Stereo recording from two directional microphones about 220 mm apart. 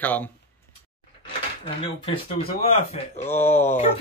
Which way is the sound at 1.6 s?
25° left (ahead or behind).